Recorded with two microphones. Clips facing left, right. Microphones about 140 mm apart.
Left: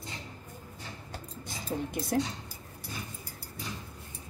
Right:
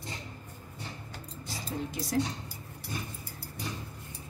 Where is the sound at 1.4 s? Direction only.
55° left (ahead or behind).